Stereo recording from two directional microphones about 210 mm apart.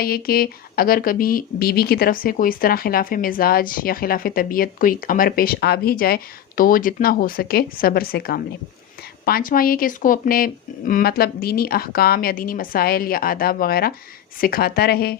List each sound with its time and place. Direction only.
0.0 s speech: 45° left (ahead or behind)